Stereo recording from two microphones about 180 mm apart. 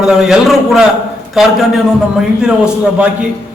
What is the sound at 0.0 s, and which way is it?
A man's voice, 5° right (ahead or behind).